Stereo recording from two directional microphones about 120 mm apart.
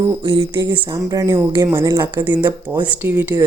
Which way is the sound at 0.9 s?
30° right (ahead or behind).